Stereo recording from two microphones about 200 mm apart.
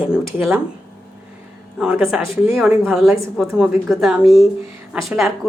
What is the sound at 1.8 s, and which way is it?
Speech, 5° right (ahead or behind).